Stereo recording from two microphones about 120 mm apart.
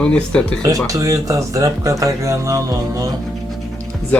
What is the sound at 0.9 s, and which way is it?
Speech, 30° right (ahead or behind).